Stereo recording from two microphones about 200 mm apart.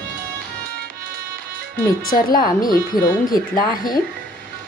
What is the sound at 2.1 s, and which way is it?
A woman's voice, 45° left (ahead or behind).